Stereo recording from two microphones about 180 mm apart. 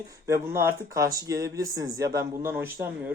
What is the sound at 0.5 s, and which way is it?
Speech, 15° right (ahead or behind).